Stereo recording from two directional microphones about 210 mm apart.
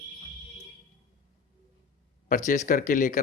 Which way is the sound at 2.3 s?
40° left (ahead or behind).